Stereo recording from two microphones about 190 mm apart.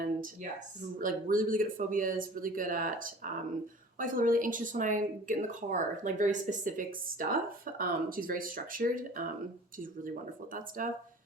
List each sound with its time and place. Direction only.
0.9 s speech: 45° right (ahead or behind)
10.5 s speech: 45° right (ahead or behind)